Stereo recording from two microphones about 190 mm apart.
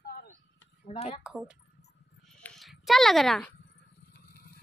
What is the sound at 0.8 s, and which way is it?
Speech, 30° left (ahead or behind).